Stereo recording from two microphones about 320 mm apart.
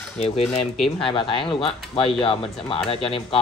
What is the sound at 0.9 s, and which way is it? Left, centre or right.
Speech, centre.